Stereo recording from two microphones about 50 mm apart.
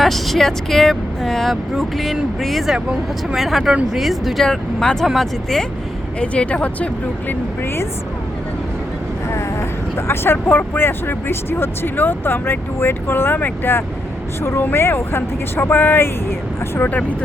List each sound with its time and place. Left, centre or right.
0.0 s speech: centre
4.4 s speech: centre
6.1 s speech: left
10.1 s speech: left
15.8 s speech: left
16.9 s speech: left